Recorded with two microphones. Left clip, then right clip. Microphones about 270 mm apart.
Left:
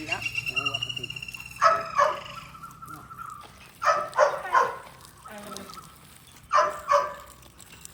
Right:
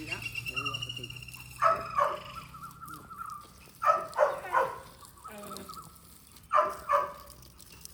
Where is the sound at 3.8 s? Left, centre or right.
Right.